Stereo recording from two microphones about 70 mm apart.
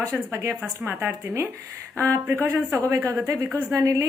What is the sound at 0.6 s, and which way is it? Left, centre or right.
Speech, right.